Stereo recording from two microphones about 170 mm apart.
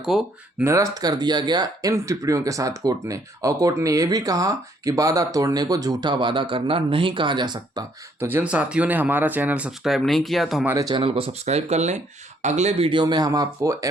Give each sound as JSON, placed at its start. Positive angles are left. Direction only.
{"t": 0.0, "sound": "speech", "side_deg": 0}
{"t": 0.6, "sound": "speech", "side_deg": -20}
{"t": 8.2, "sound": "speech", "side_deg": -10}
{"t": 10.7, "sound": "speech", "side_deg": -20}